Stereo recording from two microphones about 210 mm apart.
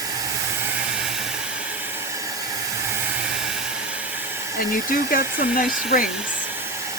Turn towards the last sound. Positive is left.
turn(degrees=40)  # may be behind; listen again after turning